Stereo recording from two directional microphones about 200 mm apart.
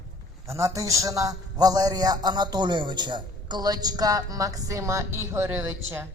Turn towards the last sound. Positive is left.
turn(degrees=-10)  # may be behind; listen again after turning